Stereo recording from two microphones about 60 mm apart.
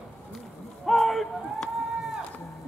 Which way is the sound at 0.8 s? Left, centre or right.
Centre.